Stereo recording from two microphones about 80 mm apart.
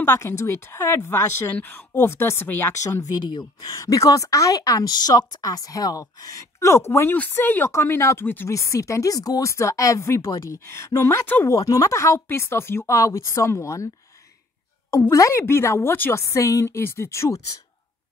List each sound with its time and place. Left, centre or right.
0.0 s a woman's voice: left
3.0 s speech: left
3.7 s speech: left
8.5 s a woman's voice: left
14.9 s a woman's voice: left